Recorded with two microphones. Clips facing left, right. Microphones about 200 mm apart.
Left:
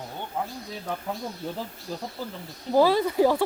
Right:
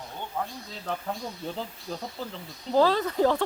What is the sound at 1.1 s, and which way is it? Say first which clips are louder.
Speech: left 1 dB; centre (ahead or behind).